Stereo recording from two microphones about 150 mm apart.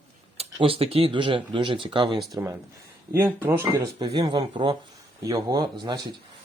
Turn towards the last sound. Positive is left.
turn(degrees=-25)  # may be behind; listen again after turning